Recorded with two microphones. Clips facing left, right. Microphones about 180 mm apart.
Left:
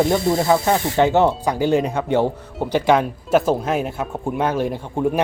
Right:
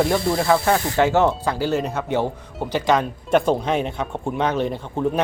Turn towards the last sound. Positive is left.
turn(degrees=10)  # may be behind; listen again after turning